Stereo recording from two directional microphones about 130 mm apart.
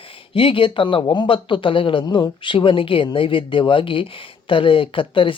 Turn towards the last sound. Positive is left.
turn(degrees=40)  # may be behind; listen again after turning